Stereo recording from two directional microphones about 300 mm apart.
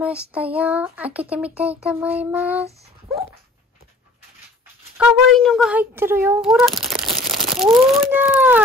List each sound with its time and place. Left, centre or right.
0.0 s a child's voice: centre
3.1 s dog: centre
4.9 s a child's voice: centre
7.2 s crumpling: right
7.5 s a child's voice: centre